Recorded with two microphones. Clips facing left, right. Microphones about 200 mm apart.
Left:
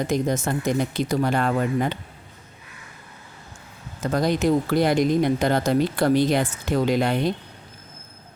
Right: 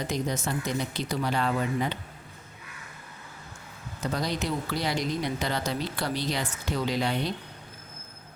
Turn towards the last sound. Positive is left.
turn(degrees=50)  # may be behind; listen again after turning